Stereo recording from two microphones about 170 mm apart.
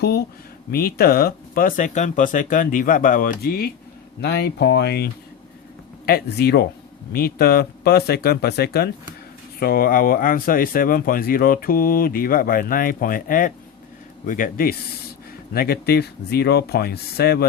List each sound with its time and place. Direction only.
0.0 s a sound: 70° left (ahead or behind)
0.7 s speech: 65° left (ahead or behind)
4.2 s speech: 70° left (ahead or behind)
6.1 s speech: 65° left (ahead or behind)